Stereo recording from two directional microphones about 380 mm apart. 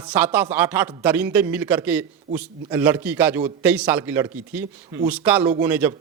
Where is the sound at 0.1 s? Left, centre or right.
Centre.